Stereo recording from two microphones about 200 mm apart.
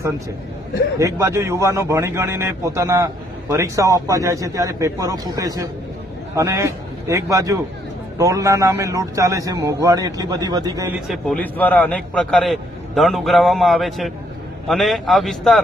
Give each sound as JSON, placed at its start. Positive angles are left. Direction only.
{"t": 0.9, "sound": "a man's voice", "side_deg": -15}
{"t": 11.1, "sound": "a man's voice", "side_deg": 5}